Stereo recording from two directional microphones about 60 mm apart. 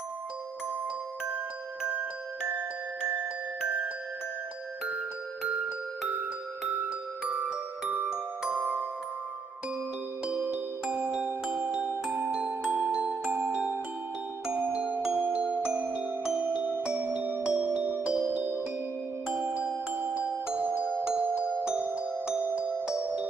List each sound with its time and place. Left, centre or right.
7.2 s glockenspiel: centre
10.2 s music: right
13.0 s glockenspiel: right
14.5 s music: right